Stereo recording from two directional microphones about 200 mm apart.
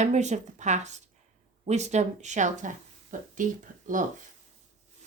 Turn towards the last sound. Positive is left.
turn(degrees=-40)  # may be behind; listen again after turning